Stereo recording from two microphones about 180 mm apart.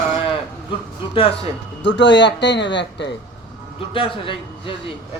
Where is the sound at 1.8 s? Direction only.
85° left.